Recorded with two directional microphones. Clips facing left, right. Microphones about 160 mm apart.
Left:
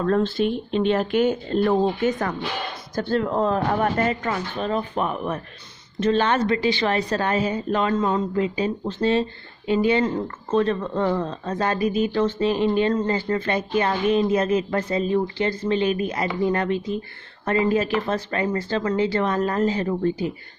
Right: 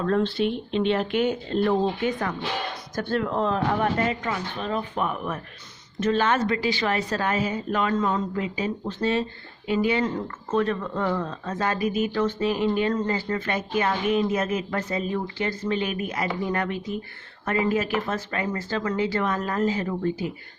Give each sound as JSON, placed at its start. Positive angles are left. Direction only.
{"t": 0.0, "sound": "a woman's voice", "side_deg": 40}